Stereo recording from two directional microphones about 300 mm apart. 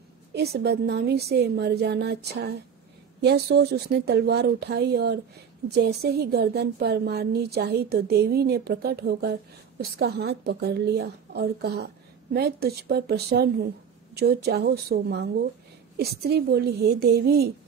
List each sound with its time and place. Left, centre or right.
0.3 s speech: right